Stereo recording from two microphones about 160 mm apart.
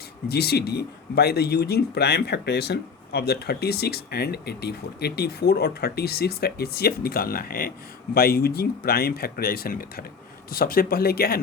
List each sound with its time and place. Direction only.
0.3 s speech: 90° left; by 11.3 s 70° left (ahead or behind)